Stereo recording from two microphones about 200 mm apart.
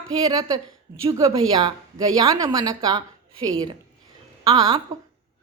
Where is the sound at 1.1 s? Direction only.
15° right (ahead or behind).